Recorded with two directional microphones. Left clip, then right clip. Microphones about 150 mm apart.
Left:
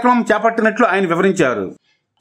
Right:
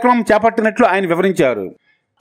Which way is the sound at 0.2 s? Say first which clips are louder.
Right 1 dB; 35° right (ahead or behind).